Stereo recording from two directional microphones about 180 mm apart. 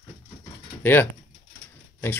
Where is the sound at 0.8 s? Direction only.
10° left (ahead or behind).